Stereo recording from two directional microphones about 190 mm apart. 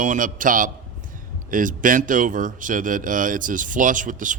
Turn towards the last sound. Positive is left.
turn(degrees=-45)  # may be behind; listen again after turning